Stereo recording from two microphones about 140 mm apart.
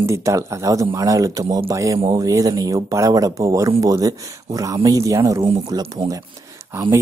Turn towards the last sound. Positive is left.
turn(degrees=-20)  # may be behind; listen again after turning